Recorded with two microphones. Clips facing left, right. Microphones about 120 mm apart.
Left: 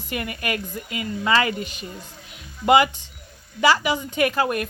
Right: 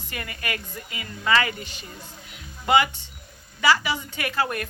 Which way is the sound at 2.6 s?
20° left (ahead or behind).